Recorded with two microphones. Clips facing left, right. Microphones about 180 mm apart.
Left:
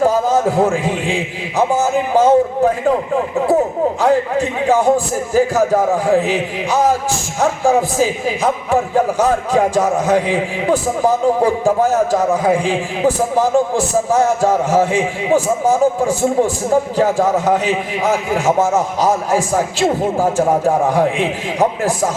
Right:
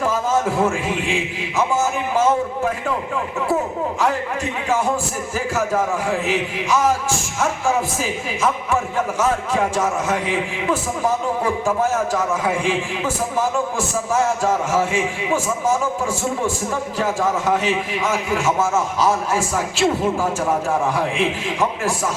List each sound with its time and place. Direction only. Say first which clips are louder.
0.0 s a man's voice: left 6 dB; 40° left (ahead or behind)